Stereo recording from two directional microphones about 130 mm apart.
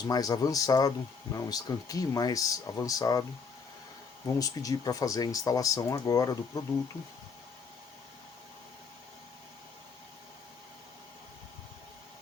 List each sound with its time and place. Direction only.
0.0 s speech: 30° left (ahead or behind)
4.4 s speech: 25° left (ahead or behind)